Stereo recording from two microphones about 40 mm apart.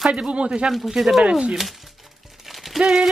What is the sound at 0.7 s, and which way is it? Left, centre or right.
Speech, centre.